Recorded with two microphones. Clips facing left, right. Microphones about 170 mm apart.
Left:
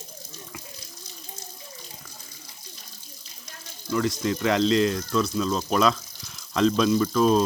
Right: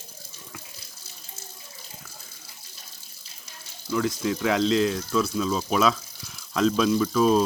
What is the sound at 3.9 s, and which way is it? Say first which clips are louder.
Speech: even; 5° right (ahead or behind).